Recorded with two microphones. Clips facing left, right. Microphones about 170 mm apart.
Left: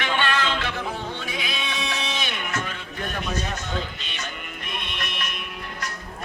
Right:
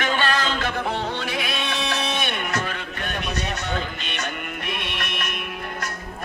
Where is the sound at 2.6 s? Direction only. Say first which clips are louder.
Right 2 dB; 70° right (ahead or behind).